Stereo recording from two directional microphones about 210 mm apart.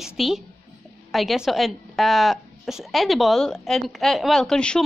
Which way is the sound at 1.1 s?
Centre (ahead or behind).